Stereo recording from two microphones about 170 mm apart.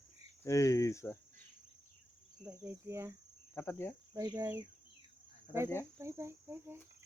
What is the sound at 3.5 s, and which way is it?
Cricket, 15° left (ahead or behind).